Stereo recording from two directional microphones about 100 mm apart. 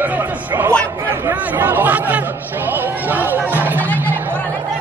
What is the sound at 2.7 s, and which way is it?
Music, 20° right (ahead or behind).